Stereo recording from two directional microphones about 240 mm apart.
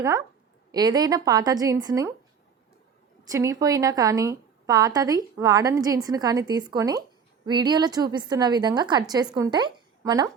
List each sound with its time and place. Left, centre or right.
0.0 s a woman's voice: centre
3.2 s a woman's voice: centre